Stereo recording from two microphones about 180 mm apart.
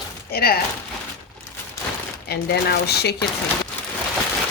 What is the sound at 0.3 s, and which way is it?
Speech, 60° left (ahead or behind).